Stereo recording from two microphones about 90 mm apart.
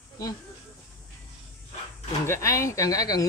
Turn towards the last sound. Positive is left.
turn(degrees=45)  # may be behind; listen again after turning